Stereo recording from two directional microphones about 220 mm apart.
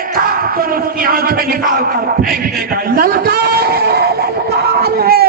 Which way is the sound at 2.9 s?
45° right (ahead or behind).